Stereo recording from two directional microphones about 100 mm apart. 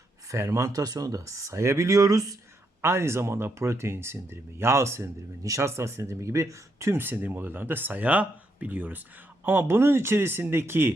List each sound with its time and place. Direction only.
0.3 s speech: 30° right (ahead or behind)